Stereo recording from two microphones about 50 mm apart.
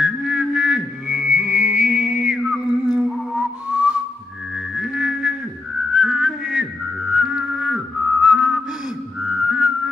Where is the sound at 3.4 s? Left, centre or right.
Right.